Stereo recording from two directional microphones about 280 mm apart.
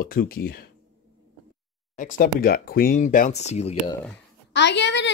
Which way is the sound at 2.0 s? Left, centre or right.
Left.